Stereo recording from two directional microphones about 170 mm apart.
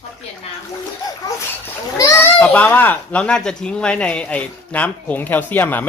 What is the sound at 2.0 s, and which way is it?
Speech, 15° left (ahead or behind).